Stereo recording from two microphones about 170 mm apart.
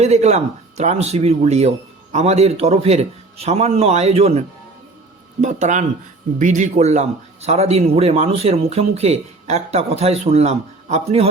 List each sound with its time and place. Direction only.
0.0 s speech: 40° right (ahead or behind)